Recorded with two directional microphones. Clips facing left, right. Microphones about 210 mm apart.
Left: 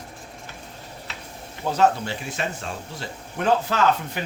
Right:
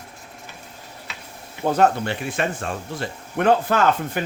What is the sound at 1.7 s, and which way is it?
Speech, 55° right (ahead or behind).